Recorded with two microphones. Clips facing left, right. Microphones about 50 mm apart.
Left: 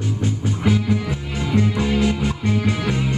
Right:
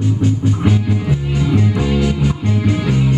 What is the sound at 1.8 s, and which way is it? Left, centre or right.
Music, centre.